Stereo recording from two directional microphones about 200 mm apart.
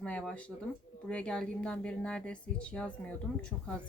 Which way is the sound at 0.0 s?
5° left (ahead or behind).